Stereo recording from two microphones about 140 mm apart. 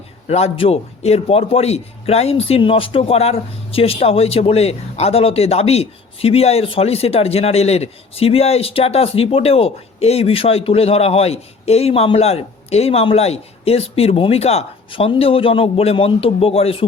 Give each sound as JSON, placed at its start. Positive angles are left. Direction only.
{"t": 0.3, "sound": "a man's voice", "side_deg": 50}